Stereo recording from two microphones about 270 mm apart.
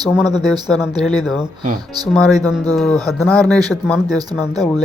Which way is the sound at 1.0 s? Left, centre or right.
Centre.